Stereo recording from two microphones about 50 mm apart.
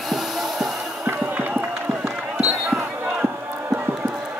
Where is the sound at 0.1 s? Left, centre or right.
Centre.